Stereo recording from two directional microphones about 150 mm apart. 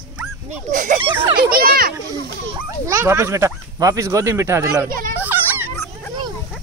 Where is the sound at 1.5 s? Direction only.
75° right (ahead or behind).